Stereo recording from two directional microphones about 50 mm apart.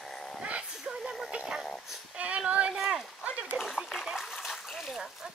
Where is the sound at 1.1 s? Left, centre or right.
Centre.